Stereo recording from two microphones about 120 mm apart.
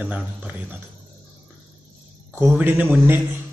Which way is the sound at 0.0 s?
15° right (ahead or behind).